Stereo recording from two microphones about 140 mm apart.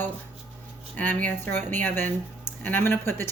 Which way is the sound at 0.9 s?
10° left (ahead or behind).